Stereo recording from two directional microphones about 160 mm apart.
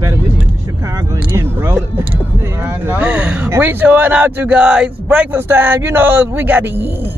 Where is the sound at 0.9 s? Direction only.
15° right (ahead or behind).